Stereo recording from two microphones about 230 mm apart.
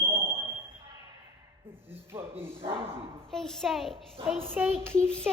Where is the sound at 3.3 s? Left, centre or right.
Centre.